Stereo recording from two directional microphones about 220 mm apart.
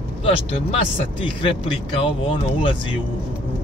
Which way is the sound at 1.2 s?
25° left (ahead or behind).